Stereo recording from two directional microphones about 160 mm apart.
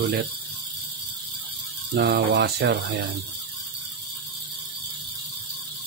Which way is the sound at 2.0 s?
90° right.